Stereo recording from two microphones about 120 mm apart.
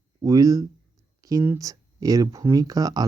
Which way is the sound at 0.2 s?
30° right (ahead or behind).